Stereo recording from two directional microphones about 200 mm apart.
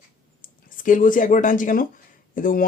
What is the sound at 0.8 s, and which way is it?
Speech, 40° left (ahead or behind).